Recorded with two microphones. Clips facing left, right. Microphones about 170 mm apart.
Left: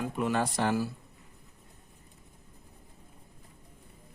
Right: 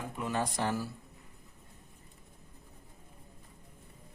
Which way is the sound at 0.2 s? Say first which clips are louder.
Left 4 dB; 75° left (ahead or behind).